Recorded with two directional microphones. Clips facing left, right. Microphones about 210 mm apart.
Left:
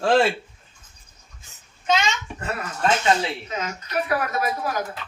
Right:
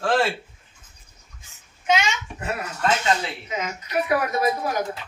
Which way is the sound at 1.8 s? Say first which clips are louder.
Even; 10° right (ahead or behind).